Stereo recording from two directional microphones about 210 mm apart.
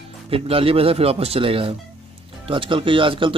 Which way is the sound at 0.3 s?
25° right (ahead or behind).